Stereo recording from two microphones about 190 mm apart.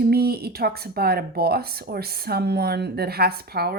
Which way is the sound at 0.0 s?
55° right (ahead or behind).